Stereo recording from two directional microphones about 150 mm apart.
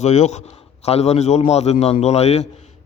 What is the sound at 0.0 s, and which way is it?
A man's voice, 50° left (ahead or behind).